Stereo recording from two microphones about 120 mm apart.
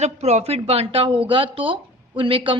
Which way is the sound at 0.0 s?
60° right (ahead or behind).